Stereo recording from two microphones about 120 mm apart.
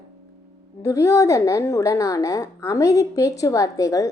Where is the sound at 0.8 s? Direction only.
25° left (ahead or behind).